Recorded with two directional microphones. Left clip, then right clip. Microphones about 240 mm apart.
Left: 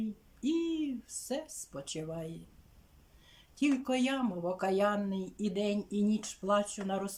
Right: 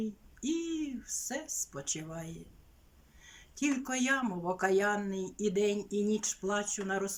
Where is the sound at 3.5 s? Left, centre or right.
Centre.